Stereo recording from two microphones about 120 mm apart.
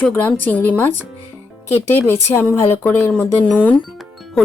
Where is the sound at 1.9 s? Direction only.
20° left (ahead or behind).